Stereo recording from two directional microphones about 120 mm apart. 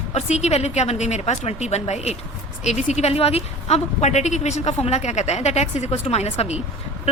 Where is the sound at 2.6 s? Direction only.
75° left (ahead or behind).